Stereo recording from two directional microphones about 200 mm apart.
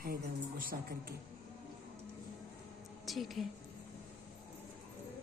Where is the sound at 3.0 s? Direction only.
Centre (ahead or behind).